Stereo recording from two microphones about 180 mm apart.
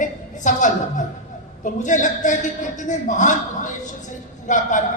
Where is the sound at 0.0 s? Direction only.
45° left (ahead or behind).